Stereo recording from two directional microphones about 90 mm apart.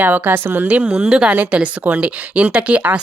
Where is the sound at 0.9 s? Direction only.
10° right (ahead or behind).